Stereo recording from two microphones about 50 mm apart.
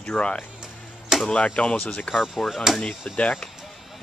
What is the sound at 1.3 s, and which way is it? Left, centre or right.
Speech, left.